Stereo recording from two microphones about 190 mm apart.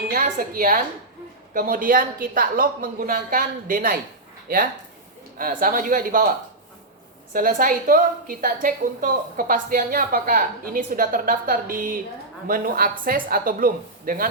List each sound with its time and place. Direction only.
0.1 s a sound: 50° right (ahead or behind)
1.5 s a woman's voice: 45° right (ahead or behind)
7.3 s a woman's voice: 45° right (ahead or behind)